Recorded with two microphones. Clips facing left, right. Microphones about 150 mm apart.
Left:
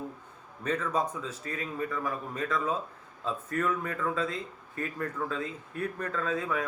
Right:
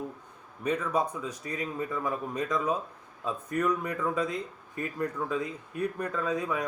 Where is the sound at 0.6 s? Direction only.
10° right (ahead or behind).